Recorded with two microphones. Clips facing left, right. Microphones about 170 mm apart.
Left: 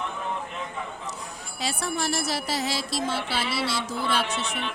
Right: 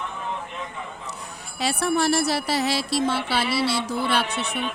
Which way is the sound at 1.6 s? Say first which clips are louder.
Right 7 dB; 65° right (ahead or behind).